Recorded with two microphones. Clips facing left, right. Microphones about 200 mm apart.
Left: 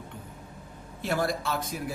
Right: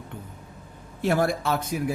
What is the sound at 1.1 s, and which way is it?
Speech, 60° right (ahead or behind).